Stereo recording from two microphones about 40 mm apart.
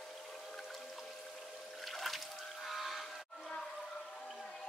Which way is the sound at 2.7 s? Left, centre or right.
Centre.